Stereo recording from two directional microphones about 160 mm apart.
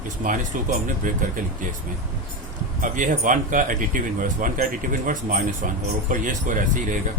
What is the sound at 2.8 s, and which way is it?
Speech, 55° right (ahead or behind).